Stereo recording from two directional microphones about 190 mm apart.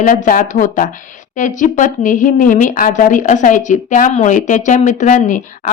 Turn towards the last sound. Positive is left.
turn(degrees=40)  # may be behind; listen again after turning